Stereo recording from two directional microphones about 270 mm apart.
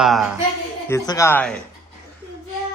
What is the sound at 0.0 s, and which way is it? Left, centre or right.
Speech, centre.